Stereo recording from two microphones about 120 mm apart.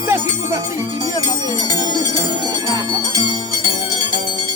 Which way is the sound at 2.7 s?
30° right (ahead or behind).